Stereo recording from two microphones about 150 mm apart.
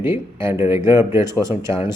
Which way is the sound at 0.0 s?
15° right (ahead or behind).